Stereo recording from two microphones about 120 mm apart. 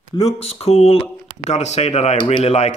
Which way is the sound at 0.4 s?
55° left (ahead or behind).